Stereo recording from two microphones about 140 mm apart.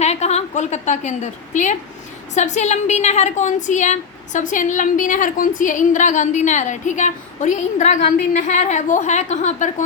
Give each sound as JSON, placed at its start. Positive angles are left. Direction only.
{"t": 0.0, "sound": "a woman's voice", "side_deg": 50}